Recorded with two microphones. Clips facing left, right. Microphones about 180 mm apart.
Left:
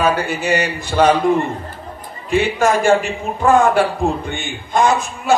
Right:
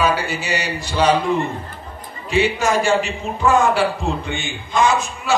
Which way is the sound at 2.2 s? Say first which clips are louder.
Left 2 dB; 50° left (ahead or behind).